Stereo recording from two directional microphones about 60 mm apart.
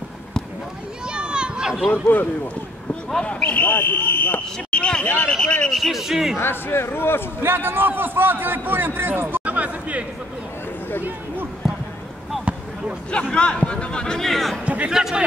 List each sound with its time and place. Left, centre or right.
1.0 s a sound: centre
1.9 s speech: left
3.1 s speech: centre; by 4.4 s left
4.6 s a sound: centre
5.0 s speech: left
5.4 s speech: centre
5.7 s speech: centre
6.3 s speech: left
7.4 s a man's voice: right
11.6 s a sound: centre
13.3 s speech: centre
14.9 s a man's voice: centre